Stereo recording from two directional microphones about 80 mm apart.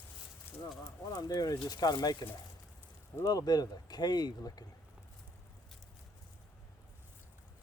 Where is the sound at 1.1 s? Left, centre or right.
Left.